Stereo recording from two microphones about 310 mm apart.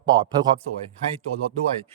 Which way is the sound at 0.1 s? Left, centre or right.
Centre.